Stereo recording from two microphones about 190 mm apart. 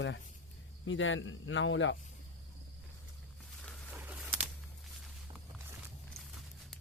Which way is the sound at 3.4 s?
5° left (ahead or behind).